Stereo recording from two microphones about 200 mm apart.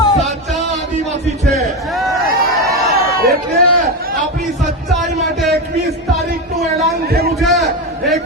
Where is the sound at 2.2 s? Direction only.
50° right (ahead or behind).